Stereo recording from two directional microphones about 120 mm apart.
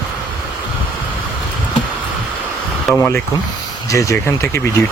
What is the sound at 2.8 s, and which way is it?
Speech, 5° left (ahead or behind).